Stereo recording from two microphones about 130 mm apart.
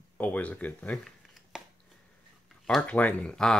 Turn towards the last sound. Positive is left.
turn(degrees=5)  # may be behind; listen again after turning